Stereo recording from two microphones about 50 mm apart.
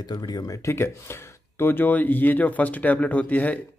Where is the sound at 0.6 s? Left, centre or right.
Left.